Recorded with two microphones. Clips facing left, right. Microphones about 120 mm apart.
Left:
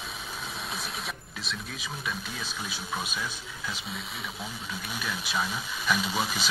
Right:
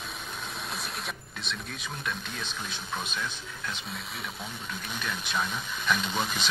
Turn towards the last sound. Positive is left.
turn(degrees=5)  # may be behind; listen again after turning